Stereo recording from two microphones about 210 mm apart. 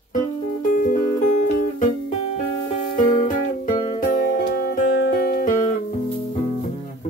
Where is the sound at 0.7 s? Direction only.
40° left (ahead or behind).